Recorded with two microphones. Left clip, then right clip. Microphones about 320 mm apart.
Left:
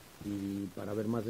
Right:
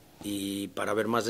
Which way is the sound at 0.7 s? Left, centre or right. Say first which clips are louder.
Right 11 dB; centre.